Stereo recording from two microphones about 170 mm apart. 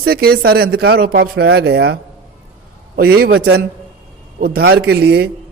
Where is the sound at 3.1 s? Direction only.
65° right (ahead or behind).